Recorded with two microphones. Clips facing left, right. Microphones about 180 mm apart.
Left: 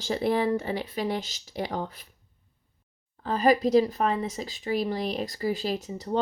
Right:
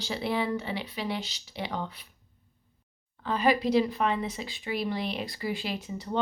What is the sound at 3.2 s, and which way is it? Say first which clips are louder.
Speech: left 3 dB; 40° left (ahead or behind).